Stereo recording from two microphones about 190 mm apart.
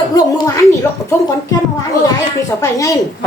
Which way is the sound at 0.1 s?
20° left (ahead or behind).